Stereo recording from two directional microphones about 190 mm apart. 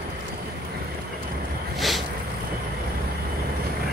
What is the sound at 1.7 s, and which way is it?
Boat, centre (ahead or behind).